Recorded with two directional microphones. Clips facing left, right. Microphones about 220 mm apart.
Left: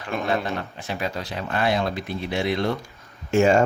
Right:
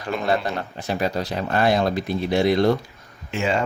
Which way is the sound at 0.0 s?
40° right (ahead or behind).